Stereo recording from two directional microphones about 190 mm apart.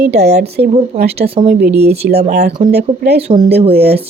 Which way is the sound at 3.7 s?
55° right (ahead or behind).